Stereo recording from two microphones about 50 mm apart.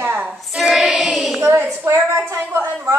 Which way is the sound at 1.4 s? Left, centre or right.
Right.